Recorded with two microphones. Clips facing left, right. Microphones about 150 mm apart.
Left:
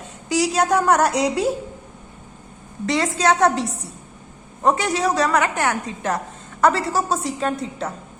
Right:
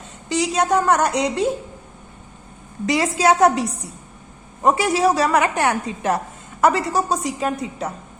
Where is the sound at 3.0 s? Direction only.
5° right (ahead or behind).